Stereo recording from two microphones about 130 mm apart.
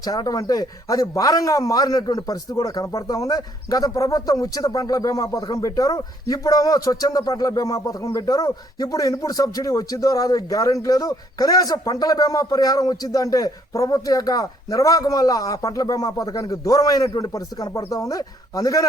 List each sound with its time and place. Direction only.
0.0 s speech: 30° left (ahead or behind)